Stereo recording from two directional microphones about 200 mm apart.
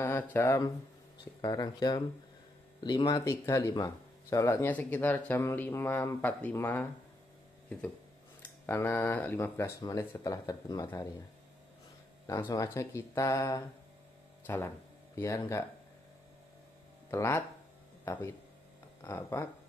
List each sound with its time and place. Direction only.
0.0 s speech: 10° left (ahead or behind)
8.6 s speech: 10° left (ahead or behind)
12.3 s speech: 15° left (ahead or behind)
17.1 s speech: 15° left (ahead or behind)